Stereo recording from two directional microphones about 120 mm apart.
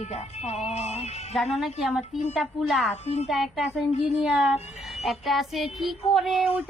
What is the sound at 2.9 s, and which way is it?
Speech, 65° left (ahead or behind).